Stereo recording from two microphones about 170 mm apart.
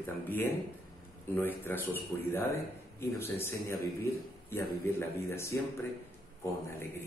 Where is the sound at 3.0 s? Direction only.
15° left (ahead or behind).